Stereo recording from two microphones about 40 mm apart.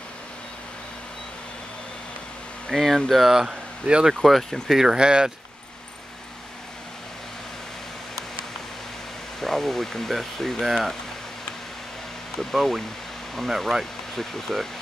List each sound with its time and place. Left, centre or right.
2.7 s speech: centre
3.3 s speech: centre
3.9 s speech: right
4.2 s speech: centre
4.6 s speech: centre
9.4 s speech: centre
12.4 s speech: centre